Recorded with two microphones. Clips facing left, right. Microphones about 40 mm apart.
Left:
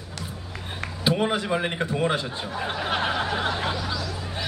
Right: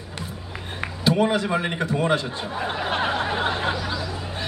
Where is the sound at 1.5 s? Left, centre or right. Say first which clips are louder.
Right 1 dB; centre.